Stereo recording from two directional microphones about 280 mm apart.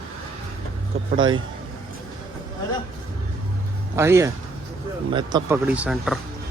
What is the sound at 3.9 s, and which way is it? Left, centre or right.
A man's voice, centre.